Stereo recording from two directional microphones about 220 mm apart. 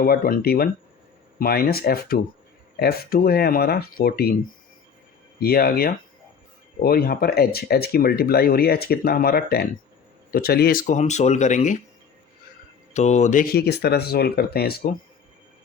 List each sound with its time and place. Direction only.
0.0 s speech: 45° left (ahead or behind)
5.4 s speech: 45° left (ahead or behind)
12.9 s speech: 30° left (ahead or behind)